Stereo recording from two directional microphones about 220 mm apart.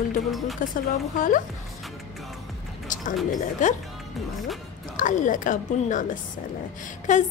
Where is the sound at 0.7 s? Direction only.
40° left (ahead or behind).